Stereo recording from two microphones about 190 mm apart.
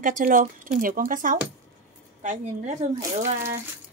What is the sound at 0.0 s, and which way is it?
Speech, 45° right (ahead or behind).